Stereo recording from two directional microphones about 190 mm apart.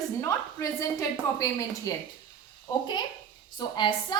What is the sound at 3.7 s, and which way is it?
Speech, 25° left (ahead or behind).